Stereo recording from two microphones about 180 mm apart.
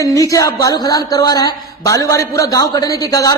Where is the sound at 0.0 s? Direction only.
20° left (ahead or behind).